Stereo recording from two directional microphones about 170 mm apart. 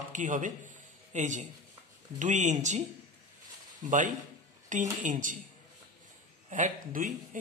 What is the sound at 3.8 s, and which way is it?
Speech, 50° right (ahead or behind).